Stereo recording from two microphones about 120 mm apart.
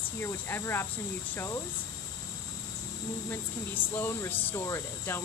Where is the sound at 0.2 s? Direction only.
20° left (ahead or behind).